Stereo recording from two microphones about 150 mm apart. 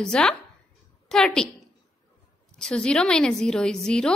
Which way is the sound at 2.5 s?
5° left (ahead or behind).